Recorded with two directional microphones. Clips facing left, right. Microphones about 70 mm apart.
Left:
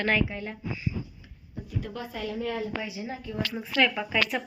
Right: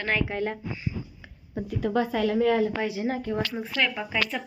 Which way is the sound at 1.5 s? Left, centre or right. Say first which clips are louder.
Right 10 dB; right.